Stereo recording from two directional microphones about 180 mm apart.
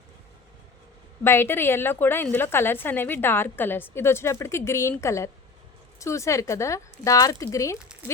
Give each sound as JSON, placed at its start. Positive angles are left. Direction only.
{"t": 1.2, "sound": "a woman's voice", "side_deg": 15}